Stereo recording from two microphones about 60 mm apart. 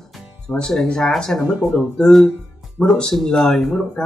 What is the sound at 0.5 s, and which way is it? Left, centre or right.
Speech, centre.